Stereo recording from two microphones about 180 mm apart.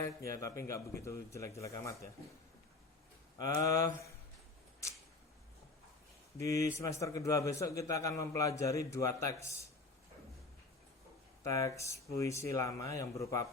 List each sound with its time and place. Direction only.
0.0 s a man's voice: 15° left (ahead or behind)
3.3 s speech: 20° left (ahead or behind)
6.4 s a man's voice: 15° left (ahead or behind)
11.4 s a man's voice: 15° left (ahead or behind)